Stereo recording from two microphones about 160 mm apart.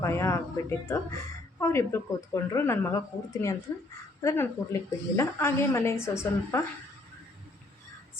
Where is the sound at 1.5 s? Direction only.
15° left (ahead or behind).